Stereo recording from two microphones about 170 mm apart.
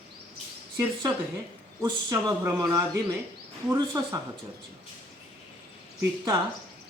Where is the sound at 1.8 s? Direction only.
20° right (ahead or behind).